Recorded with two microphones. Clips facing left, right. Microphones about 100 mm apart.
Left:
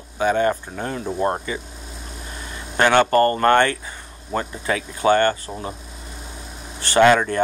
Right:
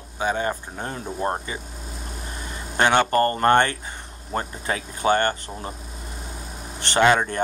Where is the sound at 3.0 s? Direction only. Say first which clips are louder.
Left 4 dB; 40° left (ahead or behind).